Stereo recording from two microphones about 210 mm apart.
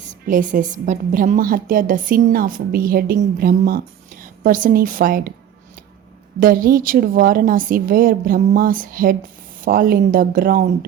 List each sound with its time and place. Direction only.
0.0 s a woman's voice: 35° right (ahead or behind)
6.4 s a woman's voice: 40° right (ahead or behind)